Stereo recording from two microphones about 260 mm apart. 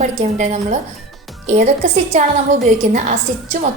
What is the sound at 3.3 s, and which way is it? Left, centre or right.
Speech, right.